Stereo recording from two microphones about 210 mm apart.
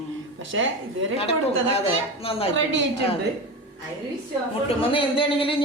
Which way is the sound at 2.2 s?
25° left (ahead or behind).